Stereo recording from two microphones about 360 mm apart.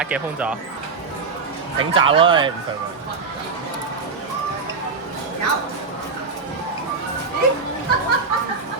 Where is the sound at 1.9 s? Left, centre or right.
Centre.